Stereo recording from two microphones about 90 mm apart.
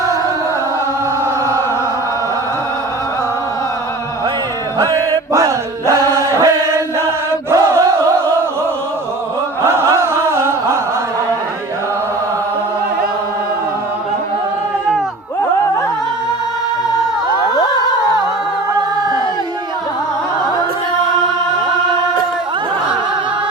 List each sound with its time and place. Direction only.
4.8 s music: 45° right (ahead or behind)
6.1 s chant: 35° right (ahead or behind)
7.5 s battle cry: 40° right (ahead or behind)
9.8 s chant: 35° right (ahead or behind)